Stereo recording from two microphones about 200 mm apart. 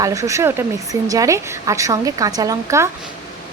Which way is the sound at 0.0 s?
15° right (ahead or behind).